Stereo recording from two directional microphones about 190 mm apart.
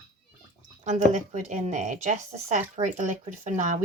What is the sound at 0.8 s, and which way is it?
Speech, 40° right (ahead or behind).